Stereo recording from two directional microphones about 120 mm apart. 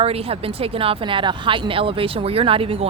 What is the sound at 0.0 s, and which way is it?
Speech, 55° right (ahead or behind).